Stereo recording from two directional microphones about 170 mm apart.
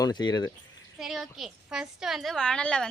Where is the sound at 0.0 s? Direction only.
25° left (ahead or behind).